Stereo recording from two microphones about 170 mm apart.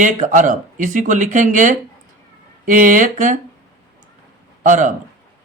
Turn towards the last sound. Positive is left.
turn(degrees=-45)  # may be behind; listen again after turning